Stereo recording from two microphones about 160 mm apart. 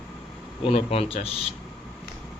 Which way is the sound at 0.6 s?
40° left (ahead or behind).